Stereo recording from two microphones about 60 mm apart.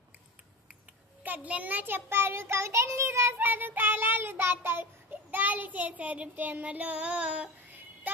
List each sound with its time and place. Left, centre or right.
1.2 s child singing: right
3.3 s child singing: right
5.1 s a child's voice: right
6.3 s child singing: right